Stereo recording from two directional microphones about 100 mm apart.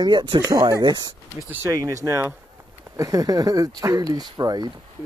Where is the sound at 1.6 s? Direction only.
35° right (ahead or behind).